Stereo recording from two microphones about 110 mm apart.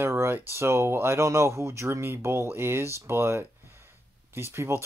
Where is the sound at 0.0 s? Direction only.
25° right (ahead or behind).